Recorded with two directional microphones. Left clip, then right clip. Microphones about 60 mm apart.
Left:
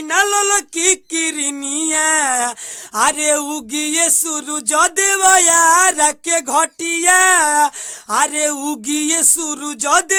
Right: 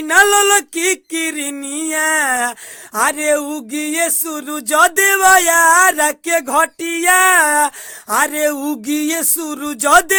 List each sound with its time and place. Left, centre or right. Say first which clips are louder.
0.9 s speech: even; right
1.6 s a sound: left 2 dB; centre
1.9 s speech: right 1 dB; right
3.0 s speech: right 1 dB; right
4.7 s speech: right 3 dB; right
5.4 s a sound: right 2 dB; right
8.7 s speech: right 1 dB; right
9.6 s speech: right 4 dB; right